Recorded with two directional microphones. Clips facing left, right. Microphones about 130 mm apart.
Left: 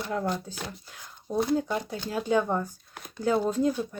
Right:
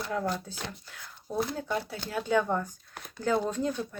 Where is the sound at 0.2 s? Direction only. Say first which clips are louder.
Left 2 dB; 15° left (ahead or behind).